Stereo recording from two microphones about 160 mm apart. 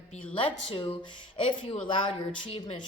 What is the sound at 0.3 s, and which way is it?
A man's voice, 35° left (ahead or behind).